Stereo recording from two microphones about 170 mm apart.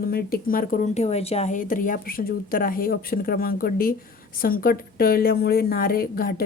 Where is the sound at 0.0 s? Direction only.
60° left (ahead or behind).